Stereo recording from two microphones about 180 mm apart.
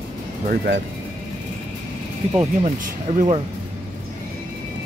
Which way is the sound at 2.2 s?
35° right (ahead or behind).